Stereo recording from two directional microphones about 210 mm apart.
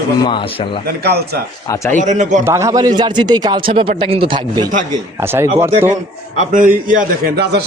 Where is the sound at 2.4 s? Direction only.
15° right (ahead or behind).